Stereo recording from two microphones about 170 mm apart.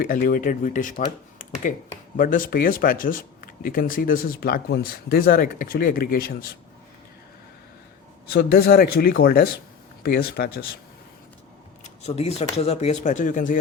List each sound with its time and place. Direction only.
0.0 s speech: 55° left (ahead or behind)
8.3 s speech: 65° left (ahead or behind)
11.8 s speech: 40° left (ahead or behind)